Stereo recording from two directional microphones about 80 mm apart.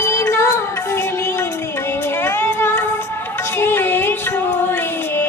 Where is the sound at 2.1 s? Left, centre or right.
Left.